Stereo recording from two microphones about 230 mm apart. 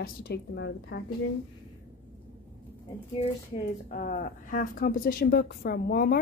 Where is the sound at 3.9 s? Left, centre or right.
Left.